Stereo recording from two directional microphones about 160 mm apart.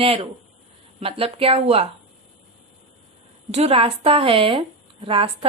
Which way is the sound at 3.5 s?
35° right (ahead or behind).